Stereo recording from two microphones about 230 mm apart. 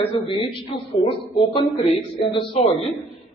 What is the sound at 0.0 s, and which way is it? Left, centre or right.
A woman's voice, left.